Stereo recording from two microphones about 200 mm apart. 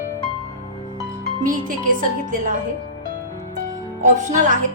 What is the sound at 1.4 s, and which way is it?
Speech, 40° right (ahead or behind).